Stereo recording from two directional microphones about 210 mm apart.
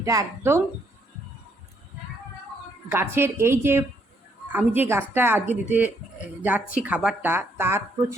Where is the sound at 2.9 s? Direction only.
10° right (ahead or behind).